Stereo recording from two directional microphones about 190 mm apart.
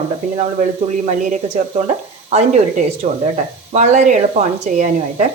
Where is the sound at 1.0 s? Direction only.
40° right (ahead or behind).